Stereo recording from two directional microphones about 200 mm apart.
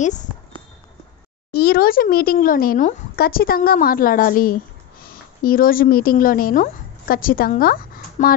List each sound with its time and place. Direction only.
0.0 s speech: 40° left (ahead or behind)
1.5 s a woman's voice: 50° left (ahead or behind)